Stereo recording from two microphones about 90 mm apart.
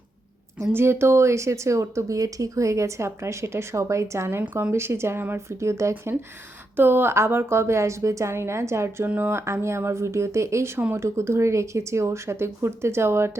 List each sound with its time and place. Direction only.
0.6 s a woman's voice: 25° right (ahead or behind)
9.4 s speech: 30° right (ahead or behind)